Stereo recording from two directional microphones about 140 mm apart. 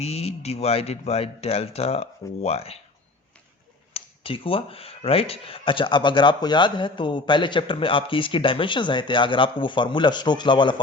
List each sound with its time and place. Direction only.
0.0 s speech: 45° left (ahead or behind)
3.9 s speech: 40° left (ahead or behind)